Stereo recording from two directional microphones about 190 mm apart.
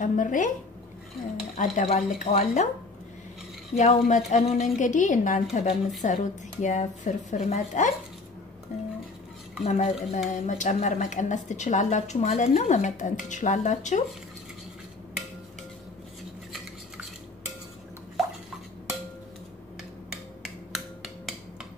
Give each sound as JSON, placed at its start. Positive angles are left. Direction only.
{"t": 0.0, "sound": "speech", "side_deg": 40}
{"t": 1.6, "sound": "a woman's voice", "side_deg": 40}
{"t": 3.7, "sound": "a woman's voice", "side_deg": 40}
{"t": 20.1, "sound": "finger snapping", "side_deg": 0}